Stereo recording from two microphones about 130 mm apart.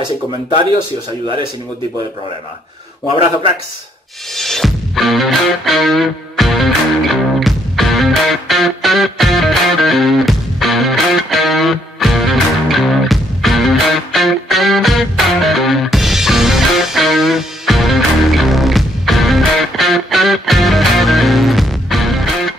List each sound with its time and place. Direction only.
4.4 s music: centre (ahead or behind)